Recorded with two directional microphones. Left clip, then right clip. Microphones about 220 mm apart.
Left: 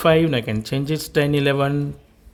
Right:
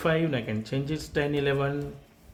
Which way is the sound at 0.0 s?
50° left (ahead or behind).